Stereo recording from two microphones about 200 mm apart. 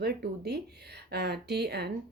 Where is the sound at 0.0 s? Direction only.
55° right (ahead or behind).